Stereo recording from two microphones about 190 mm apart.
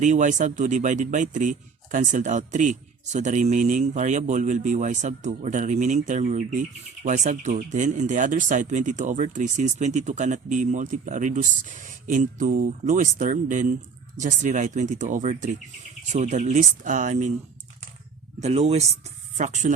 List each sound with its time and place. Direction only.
0.0 s speech: 40° right (ahead or behind)
18.3 s speech: 35° right (ahead or behind)